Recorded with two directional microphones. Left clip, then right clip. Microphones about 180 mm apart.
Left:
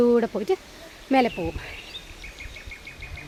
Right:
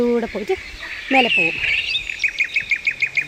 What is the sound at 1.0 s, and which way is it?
Speech, 10° right (ahead or behind).